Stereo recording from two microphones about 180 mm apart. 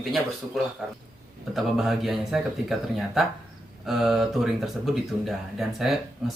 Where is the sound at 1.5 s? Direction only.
Centre (ahead or behind).